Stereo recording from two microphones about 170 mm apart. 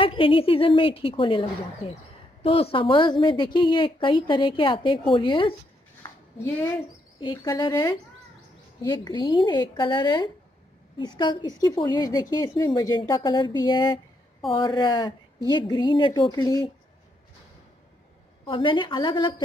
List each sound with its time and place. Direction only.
0.0 s a woman's voice: 30° left (ahead or behind)
2.4 s a woman's voice: 35° left (ahead or behind)
6.3 s speech: 15° left (ahead or behind)
7.2 s a woman's voice: 25° left (ahead or behind)
18.4 s a woman's voice: 30° left (ahead or behind)